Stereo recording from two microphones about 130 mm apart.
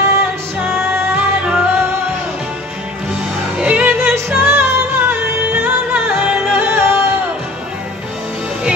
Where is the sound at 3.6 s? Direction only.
10° right (ahead or behind).